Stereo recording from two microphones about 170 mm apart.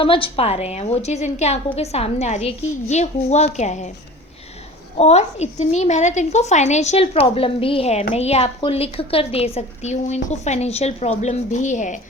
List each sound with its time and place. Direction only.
0.0 s a woman's voice: 30° left (ahead or behind)
4.9 s a woman's voice: 40° left (ahead or behind)